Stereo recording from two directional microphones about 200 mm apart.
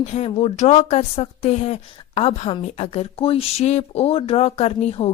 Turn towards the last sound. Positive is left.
turn(degrees=30)  # may be behind; listen again after turning